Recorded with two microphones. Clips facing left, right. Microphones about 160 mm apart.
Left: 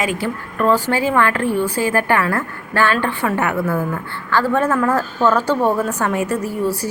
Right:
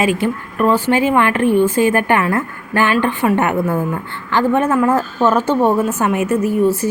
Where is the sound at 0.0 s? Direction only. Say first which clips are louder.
Right 5 dB; 20° right (ahead or behind).